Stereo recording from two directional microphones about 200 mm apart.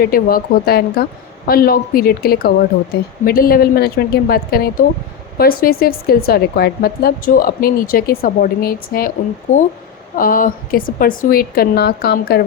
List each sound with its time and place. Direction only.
0.0 s speech: 45° left (ahead or behind)